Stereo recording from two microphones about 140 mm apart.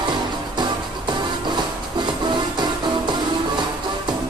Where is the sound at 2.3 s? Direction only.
30° right (ahead or behind).